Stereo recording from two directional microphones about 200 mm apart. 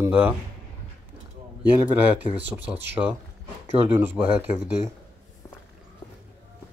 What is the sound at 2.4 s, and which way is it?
Speech, 10° right (ahead or behind).